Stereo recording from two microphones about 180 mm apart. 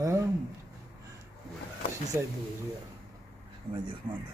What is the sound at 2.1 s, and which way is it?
Speech, 15° right (ahead or behind).